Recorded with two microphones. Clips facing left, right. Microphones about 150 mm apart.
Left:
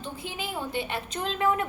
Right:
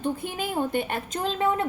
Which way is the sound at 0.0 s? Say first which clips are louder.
Right 7 dB; 50° right (ahead or behind).